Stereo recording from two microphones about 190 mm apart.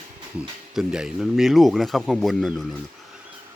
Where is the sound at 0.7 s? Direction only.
5° right (ahead or behind).